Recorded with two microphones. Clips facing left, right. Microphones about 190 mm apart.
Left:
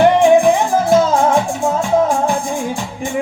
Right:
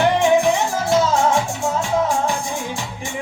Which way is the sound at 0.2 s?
55° left (ahead or behind).